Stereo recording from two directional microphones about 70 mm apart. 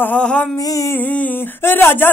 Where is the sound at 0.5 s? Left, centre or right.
Left.